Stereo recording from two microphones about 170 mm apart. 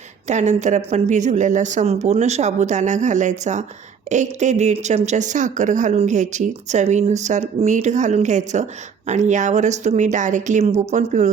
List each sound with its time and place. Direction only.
0.3 s speech: 45° right (ahead or behind)